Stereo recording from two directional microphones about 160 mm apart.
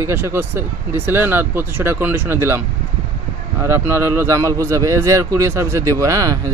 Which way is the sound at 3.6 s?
15° right (ahead or behind).